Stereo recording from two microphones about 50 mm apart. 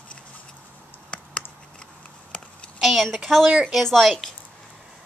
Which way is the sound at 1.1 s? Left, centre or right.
Centre.